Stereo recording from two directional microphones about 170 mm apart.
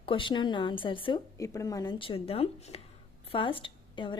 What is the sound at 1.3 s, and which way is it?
Speech, 20° left (ahead or behind).